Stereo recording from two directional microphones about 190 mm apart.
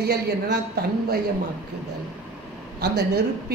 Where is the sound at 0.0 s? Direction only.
60° right (ahead or behind).